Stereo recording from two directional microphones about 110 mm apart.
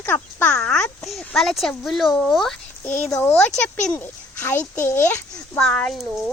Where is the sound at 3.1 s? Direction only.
20° left (ahead or behind).